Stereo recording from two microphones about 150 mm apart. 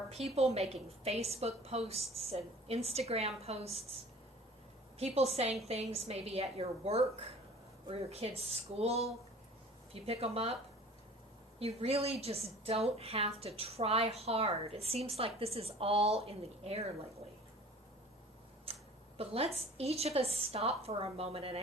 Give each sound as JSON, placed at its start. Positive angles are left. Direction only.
{"t": 0.1, "sound": "a woman's voice", "side_deg": -45}
{"t": 4.9, "sound": "a woman's voice", "side_deg": -45}
{"t": 11.6, "sound": "a woman's voice", "side_deg": -45}
{"t": 18.6, "sound": "speech", "side_deg": -40}